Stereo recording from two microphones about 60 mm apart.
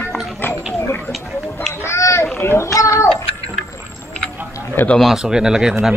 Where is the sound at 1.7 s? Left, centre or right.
Left.